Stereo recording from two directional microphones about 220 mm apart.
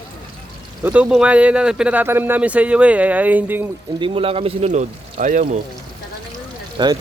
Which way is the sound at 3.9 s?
25° right (ahead or behind).